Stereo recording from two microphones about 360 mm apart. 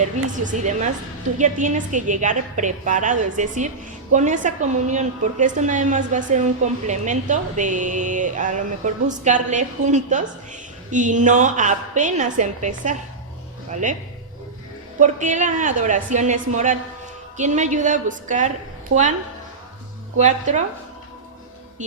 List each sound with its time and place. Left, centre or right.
0.0 s a woman's voice: centre
14.9 s a woman's voice: right
18.9 s a woman's voice: right
20.1 s a woman's voice: centre